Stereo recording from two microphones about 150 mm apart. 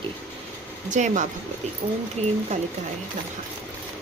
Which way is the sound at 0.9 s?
55° right (ahead or behind).